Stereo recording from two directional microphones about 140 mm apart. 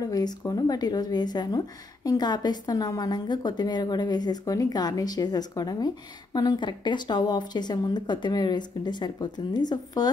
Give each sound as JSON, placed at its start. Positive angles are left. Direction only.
{"t": 0.1, "sound": "a woman's voice", "side_deg": 30}